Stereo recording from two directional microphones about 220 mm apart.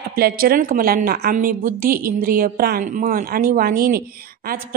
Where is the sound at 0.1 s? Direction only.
45° right (ahead or behind).